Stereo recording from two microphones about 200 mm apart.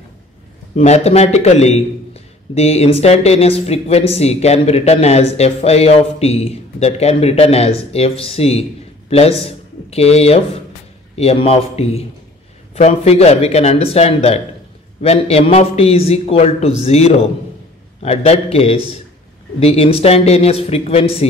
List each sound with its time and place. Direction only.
0.7 s a man's voice: 35° left (ahead or behind)